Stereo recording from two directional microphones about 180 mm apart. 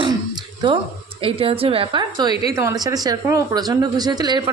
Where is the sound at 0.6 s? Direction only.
25° right (ahead or behind).